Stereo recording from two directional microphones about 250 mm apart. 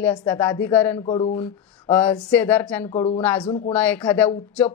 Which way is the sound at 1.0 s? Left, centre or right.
Centre.